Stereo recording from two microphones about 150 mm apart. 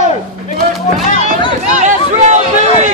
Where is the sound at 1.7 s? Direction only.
50° right (ahead or behind).